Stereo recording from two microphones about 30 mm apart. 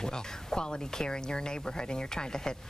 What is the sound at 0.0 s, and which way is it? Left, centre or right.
Speech, left.